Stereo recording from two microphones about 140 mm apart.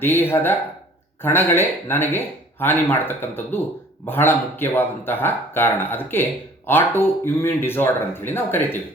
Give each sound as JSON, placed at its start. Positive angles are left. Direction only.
{"t": 0.0, "sound": "speech", "side_deg": 15}